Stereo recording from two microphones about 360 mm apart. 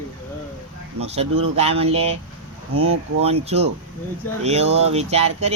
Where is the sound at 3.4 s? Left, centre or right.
Centre.